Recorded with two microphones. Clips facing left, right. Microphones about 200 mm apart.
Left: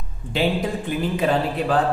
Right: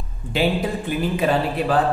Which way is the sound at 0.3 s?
5° right (ahead or behind).